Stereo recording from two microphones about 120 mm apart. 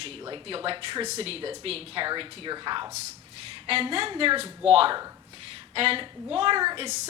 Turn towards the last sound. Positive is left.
turn(degrees=-40)  # may be behind; listen again after turning